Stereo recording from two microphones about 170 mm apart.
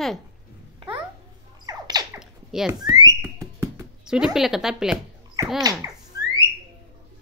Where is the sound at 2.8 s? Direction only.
25° right (ahead or behind).